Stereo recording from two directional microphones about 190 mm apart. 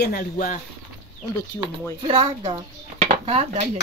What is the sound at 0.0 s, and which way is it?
Speech, 50° left (ahead or behind).